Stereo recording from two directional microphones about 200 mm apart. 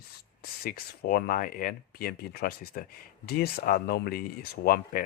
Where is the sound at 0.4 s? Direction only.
50° left (ahead or behind).